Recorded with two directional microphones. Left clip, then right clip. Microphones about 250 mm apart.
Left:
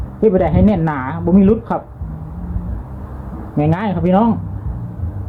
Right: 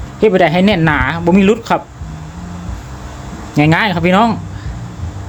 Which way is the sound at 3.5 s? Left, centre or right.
Right.